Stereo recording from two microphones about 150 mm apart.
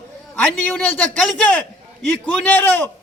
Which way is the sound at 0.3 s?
10° left (ahead or behind).